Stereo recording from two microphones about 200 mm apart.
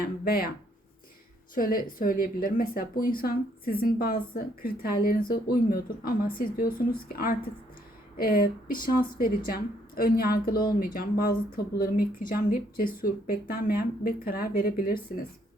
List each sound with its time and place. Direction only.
0.0 s speech: 50° left (ahead or behind)
1.5 s speech: 45° left (ahead or behind)